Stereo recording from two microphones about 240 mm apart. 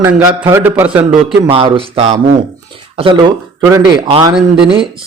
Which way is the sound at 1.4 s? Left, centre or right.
Right.